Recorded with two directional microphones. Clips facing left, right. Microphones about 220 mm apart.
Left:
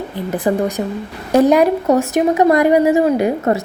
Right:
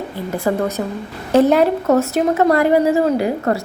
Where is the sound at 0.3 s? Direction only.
20° left (ahead or behind).